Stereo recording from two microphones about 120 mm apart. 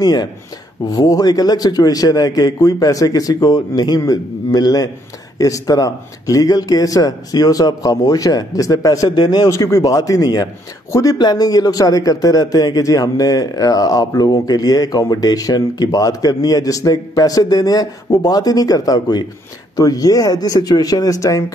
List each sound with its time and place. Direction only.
0.0 s speech: 35° left (ahead or behind)